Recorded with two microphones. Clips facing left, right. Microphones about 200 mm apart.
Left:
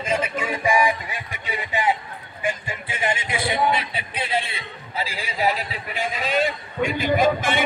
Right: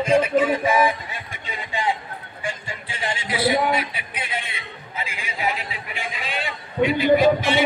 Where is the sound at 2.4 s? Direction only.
20° left (ahead or behind).